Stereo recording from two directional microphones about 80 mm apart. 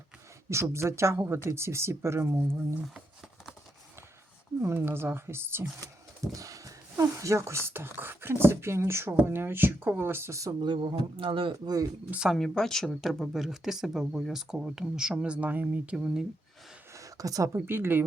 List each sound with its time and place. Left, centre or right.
0.5 s speech: right
4.6 s speech: right
6.3 s speech: right
10.6 s speech: right
12.3 s speech: centre
16.9 s a sound: right
17.7 s speech: right